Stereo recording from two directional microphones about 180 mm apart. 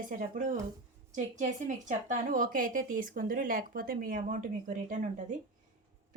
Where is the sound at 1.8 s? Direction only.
45° right (ahead or behind).